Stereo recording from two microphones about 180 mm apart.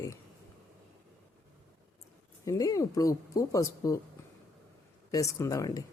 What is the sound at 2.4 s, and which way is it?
Speech, 20° left (ahead or behind).